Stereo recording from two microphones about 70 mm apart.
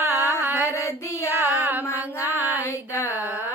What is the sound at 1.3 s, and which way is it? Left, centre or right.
Child singing, right.